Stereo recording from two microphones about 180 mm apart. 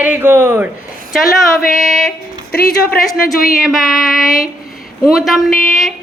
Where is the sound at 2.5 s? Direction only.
55° left (ahead or behind).